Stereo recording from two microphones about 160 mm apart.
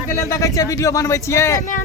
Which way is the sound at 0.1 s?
20° left (ahead or behind).